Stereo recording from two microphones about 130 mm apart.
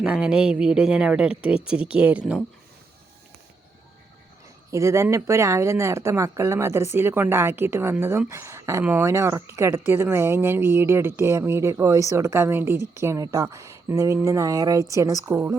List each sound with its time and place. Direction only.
0.0 s a woman's voice: 5° right (ahead or behind)
4.7 s a woman's voice: 25° right (ahead or behind)
9.0 s speech: 20° right (ahead or behind)